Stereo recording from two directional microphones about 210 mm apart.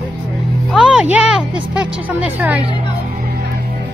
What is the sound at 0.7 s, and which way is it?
Speech, 5° right (ahead or behind).